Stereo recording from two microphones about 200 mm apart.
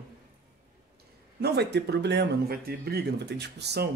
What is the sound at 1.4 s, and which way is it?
Speech, 55° right (ahead or behind).